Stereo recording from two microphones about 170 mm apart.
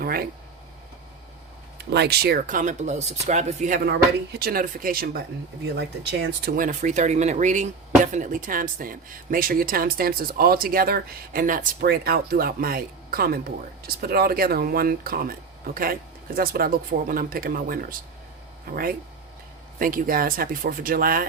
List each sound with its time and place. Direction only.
0.0 s speech: 60° right (ahead or behind)
1.8 s speech: 80° right; by 3.8 s 45° right (ahead or behind)
3.8 s speech: 70° right (ahead or behind)
5.6 s speech: 80° right
6.6 s speech: 45° right (ahead or behind)